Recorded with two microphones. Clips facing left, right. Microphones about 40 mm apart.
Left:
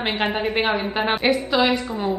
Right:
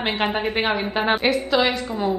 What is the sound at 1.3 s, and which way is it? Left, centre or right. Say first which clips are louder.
Speech: even; centre.